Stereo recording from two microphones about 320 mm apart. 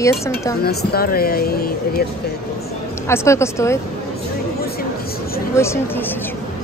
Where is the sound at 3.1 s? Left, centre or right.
Centre.